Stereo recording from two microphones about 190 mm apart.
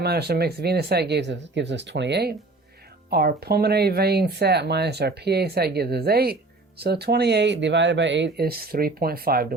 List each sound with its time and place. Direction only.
0.0 s speech: 60° right (ahead or behind)